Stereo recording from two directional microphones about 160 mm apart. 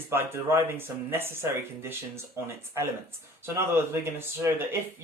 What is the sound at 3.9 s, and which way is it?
Speech, 15° right (ahead or behind).